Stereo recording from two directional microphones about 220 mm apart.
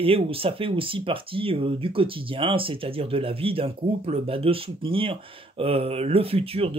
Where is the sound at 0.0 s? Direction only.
25° right (ahead or behind).